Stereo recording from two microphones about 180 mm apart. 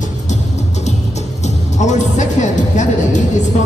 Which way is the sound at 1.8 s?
40° left (ahead or behind).